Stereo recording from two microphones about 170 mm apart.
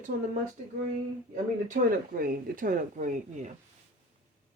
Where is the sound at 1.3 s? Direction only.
55° right (ahead or behind).